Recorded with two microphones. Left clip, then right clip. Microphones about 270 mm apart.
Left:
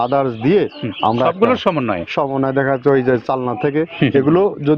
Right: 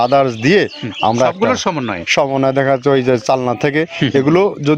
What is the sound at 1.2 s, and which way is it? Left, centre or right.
Speech, centre.